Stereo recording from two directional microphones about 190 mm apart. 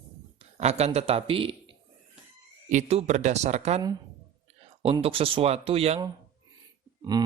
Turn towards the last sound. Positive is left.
turn(degrees=-20)  # may be behind; listen again after turning